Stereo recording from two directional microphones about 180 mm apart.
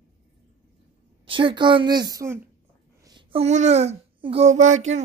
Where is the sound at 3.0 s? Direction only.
25° right (ahead or behind).